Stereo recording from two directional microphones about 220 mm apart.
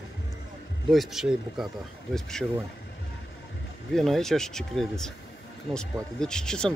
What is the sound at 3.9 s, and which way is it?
Speech, centre (ahead or behind).